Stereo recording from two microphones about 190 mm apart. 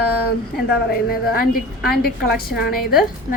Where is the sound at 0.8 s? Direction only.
50° left (ahead or behind).